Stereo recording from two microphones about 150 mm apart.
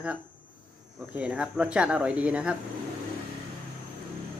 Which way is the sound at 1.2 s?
10° right (ahead or behind).